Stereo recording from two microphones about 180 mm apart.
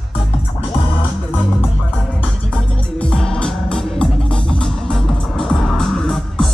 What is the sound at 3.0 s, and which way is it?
Music, 5° left (ahead or behind).